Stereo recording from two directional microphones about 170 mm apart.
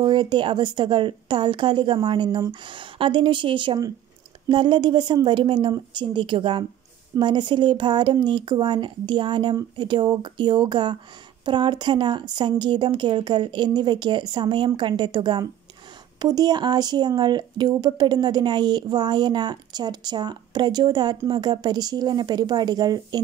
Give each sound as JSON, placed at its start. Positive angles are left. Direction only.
{"t": 0.0, "sound": "speech", "side_deg": -30}